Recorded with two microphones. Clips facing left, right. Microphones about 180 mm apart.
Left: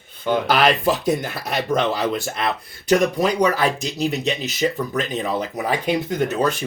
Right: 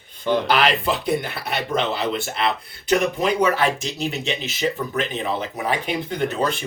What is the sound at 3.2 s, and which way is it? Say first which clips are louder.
Speech: left 1 dB; 40° left (ahead or behind).